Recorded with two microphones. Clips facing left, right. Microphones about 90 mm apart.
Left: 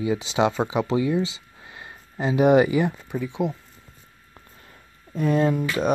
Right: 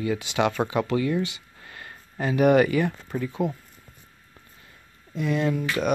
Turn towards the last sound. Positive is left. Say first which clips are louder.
# left 2 dB
turn(degrees=35)  # may be behind; listen again after turning